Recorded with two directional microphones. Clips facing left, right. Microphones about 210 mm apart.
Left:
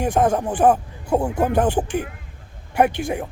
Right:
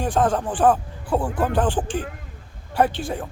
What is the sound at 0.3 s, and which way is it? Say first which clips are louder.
Speech: left 2 dB; 10° left (ahead or behind).